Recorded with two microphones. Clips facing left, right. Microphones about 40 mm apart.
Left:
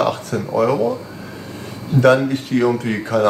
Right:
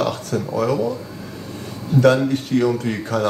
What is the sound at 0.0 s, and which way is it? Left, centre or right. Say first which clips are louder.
Speech: left 2 dB; centre.